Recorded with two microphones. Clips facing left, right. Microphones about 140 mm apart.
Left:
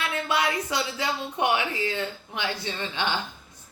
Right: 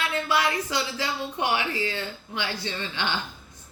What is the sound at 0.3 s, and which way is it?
A woman's voice, 20° left (ahead or behind).